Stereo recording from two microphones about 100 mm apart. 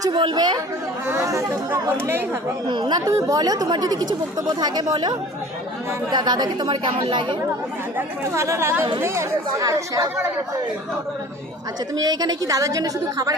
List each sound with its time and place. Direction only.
0.0 s speech: 50° right (ahead or behind)
1.0 s speech: 30° right (ahead or behind)
2.6 s speech: 55° right (ahead or behind)
3.1 s speech: 30° right (ahead or behind); by 7.3 s 55° right (ahead or behind)
7.9 s speech: 30° right (ahead or behind)
11.9 s speech: 40° right (ahead or behind)